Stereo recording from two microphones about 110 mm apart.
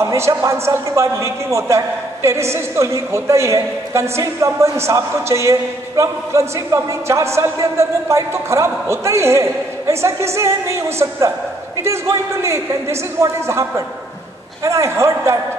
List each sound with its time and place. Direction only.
0.0 s a woman's voice: 25° right (ahead or behind)